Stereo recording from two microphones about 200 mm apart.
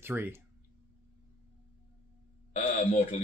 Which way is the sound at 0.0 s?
10° right (ahead or behind).